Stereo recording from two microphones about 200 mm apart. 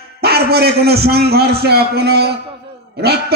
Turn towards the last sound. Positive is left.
turn(degrees=-55)  # may be behind; listen again after turning